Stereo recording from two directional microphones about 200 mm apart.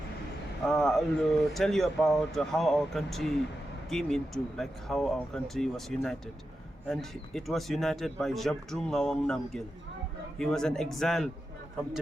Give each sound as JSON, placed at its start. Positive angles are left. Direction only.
{"t": 0.7, "sound": "speech", "side_deg": 0}